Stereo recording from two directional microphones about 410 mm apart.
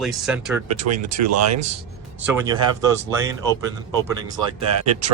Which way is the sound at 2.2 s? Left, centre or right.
Centre.